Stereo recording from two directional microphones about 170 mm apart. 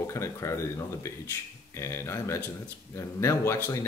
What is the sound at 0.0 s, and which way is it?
Speech, 15° left (ahead or behind).